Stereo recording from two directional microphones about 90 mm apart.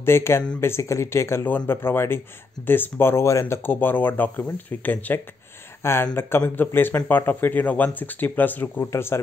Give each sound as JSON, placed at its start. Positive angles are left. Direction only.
{"t": 0.0, "sound": "speech", "side_deg": 30}